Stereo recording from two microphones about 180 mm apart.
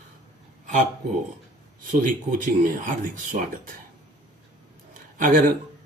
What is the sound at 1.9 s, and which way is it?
Speech, 50° right (ahead or behind).